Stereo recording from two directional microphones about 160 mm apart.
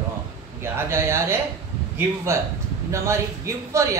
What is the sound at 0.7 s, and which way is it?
A man's voice, 15° right (ahead or behind).